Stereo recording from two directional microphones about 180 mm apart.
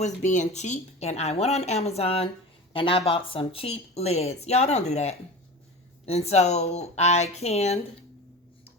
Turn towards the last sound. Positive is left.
turn(degrees=35)  # may be behind; listen again after turning